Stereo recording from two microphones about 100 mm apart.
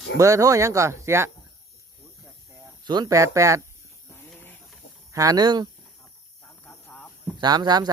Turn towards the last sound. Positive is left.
turn(degrees=-45)  # may be behind; listen again after turning